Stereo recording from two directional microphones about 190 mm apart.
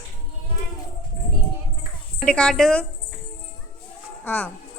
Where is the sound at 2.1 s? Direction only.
5° left (ahead or behind).